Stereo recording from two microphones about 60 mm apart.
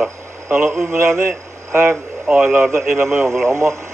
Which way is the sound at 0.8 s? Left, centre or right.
Right.